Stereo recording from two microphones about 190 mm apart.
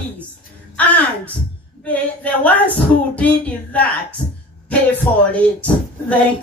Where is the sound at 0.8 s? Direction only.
10° left (ahead or behind).